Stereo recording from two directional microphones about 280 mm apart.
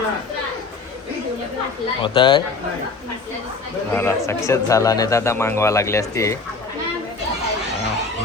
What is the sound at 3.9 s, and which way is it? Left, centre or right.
Speech, centre.